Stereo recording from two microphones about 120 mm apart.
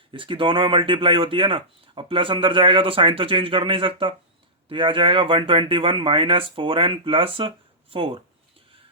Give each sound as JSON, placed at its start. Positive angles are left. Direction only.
{"t": 0.1, "sound": "speech", "side_deg": -45}